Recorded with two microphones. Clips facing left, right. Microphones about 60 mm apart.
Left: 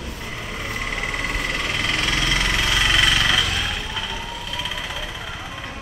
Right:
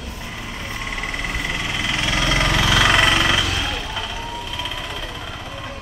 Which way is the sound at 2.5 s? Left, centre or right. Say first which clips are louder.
Right 4 dB; right.